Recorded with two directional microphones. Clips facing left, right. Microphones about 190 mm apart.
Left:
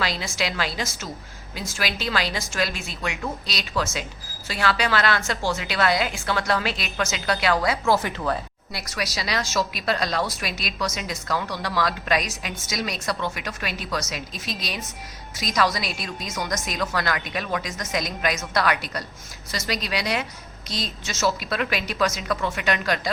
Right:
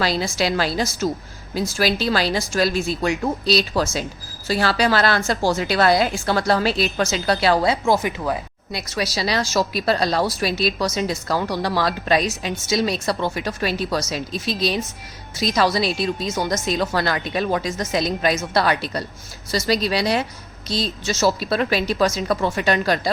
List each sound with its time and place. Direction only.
0.0 s a woman's voice: 35° right (ahead or behind)
7.9 s speech: 15° right (ahead or behind)
8.9 s a woman's voice: 30° right (ahead or behind)